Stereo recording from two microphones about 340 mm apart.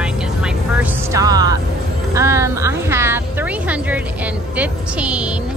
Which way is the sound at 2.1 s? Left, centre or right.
Centre.